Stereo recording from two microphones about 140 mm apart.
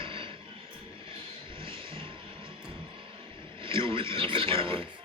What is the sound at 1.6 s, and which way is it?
Vehicle, 40° right (ahead or behind).